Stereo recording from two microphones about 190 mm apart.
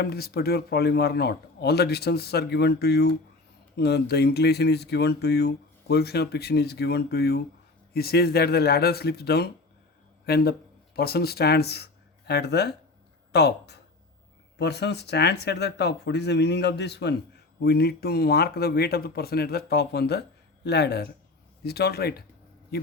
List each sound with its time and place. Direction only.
0.0 s speech: 55° left (ahead or behind)